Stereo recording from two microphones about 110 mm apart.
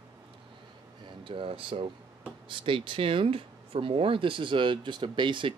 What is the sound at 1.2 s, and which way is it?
Speech, 55° right (ahead or behind).